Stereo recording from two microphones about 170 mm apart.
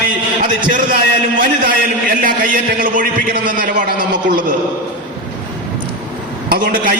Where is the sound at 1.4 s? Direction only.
55° right (ahead or behind).